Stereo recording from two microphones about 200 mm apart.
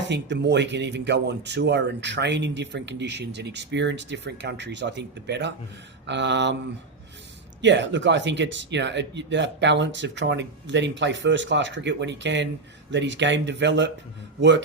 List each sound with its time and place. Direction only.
0.1 s speech: 60° right (ahead or behind)
7.6 s speech: 60° right (ahead or behind)